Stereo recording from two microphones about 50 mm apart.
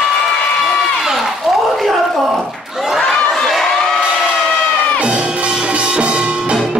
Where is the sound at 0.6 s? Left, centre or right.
Centre.